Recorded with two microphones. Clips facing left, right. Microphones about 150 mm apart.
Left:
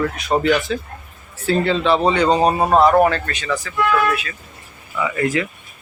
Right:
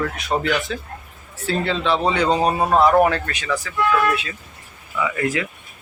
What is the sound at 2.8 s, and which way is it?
Speech, 5° right (ahead or behind).